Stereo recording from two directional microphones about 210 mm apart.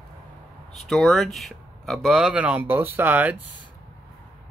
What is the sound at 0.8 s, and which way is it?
Speech, centre (ahead or behind).